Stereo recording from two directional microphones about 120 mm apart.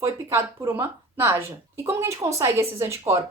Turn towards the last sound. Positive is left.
turn(degrees=-25)  # may be behind; listen again after turning